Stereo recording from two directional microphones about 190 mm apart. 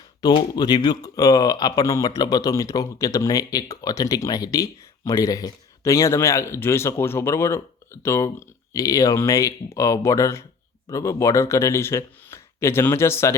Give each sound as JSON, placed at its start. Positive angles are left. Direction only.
{"t": 0.2, "sound": "speech", "side_deg": 20}